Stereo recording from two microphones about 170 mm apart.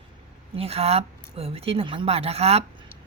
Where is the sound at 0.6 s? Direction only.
35° right (ahead or behind).